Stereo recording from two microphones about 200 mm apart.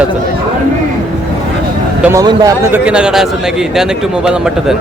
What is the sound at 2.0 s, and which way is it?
Speech, 15° right (ahead or behind).